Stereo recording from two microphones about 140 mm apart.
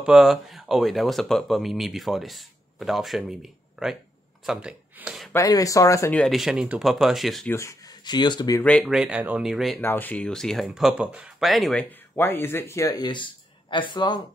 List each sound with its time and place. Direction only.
0.0 s speech: centre (ahead or behind)
5.3 s speech: 25° left (ahead or behind)
6.1 s speech: centre (ahead or behind)
7.4 s speech: 20° left (ahead or behind)
8.0 s speech: 30° left (ahead or behind)
8.8 s speech: 5° right (ahead or behind)
9.8 s speech: 15° left (ahead or behind)
12.2 s speech: 15° left (ahead or behind); by 14.2 s 30° left (ahead or behind)